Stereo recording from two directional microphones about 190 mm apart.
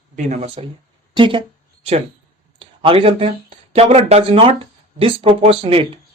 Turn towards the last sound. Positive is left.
turn(degrees=-30)  # may be behind; listen again after turning